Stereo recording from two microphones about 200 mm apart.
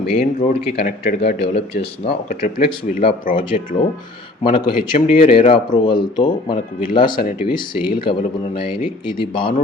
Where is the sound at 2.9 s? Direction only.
40° left (ahead or behind).